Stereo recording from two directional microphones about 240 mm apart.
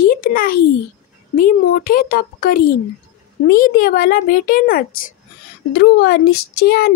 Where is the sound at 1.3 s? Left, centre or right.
Left.